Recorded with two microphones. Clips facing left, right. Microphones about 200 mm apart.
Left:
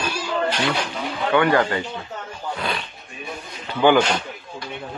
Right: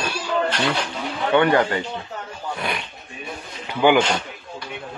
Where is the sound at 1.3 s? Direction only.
25° right (ahead or behind).